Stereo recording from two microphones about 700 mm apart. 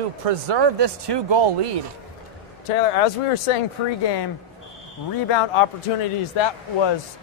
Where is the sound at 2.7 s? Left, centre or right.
Left.